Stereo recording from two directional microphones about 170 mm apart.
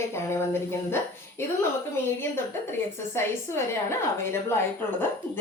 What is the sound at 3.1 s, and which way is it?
Speech, 15° left (ahead or behind).